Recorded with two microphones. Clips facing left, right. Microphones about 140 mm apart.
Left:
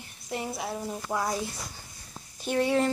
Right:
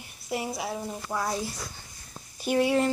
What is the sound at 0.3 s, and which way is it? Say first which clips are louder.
Speech: right 2 dB; 5° right (ahead or behind).